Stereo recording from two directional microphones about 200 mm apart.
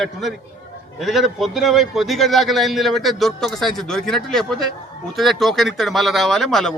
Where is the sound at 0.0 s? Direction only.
Centre (ahead or behind).